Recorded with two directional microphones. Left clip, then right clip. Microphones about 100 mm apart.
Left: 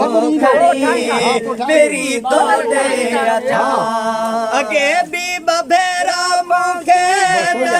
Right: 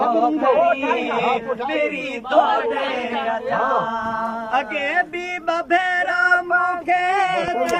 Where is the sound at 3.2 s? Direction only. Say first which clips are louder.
Left 4 dB; 55° left (ahead or behind).